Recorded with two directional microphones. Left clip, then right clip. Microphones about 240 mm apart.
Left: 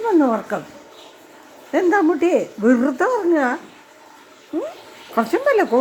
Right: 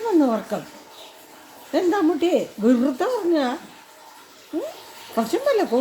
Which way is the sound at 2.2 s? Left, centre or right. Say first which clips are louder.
Left 3 dB; centre.